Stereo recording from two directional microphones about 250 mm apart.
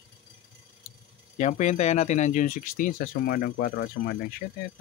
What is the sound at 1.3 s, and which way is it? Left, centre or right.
Speech, left.